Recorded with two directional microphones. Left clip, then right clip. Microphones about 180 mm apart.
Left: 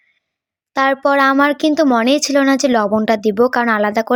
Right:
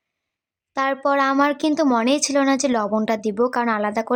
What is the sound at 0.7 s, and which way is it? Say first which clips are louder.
A woman's voice: left 6 dB; 25° left (ahead or behind).